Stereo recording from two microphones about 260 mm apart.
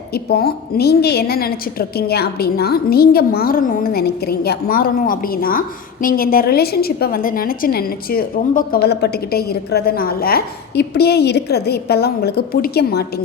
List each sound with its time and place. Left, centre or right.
0.1 s a woman's voice: left